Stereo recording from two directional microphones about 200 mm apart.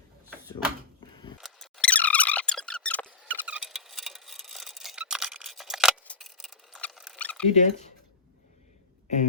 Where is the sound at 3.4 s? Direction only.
5° right (ahead or behind).